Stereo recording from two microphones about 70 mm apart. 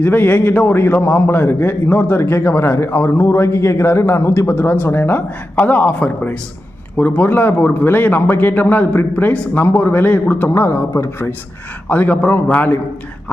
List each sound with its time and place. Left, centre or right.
0.0 s a man's voice: left
11.9 s speech: left